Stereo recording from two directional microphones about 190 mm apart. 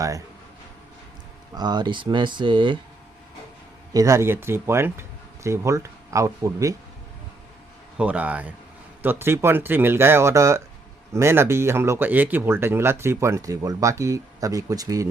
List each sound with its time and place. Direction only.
1.5 s speech: 20° right (ahead or behind)
3.9 s speech: 15° right (ahead or behind)
7.9 s speech: 5° right (ahead or behind)